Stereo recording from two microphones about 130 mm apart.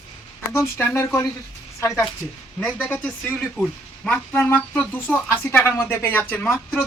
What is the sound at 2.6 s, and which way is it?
Speech, 10° left (ahead or behind).